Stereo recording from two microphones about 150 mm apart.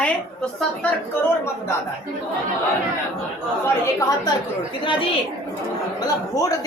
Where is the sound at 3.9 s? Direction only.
20° left (ahead or behind).